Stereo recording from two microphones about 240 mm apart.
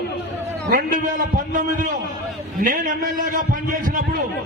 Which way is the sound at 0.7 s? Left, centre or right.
Right.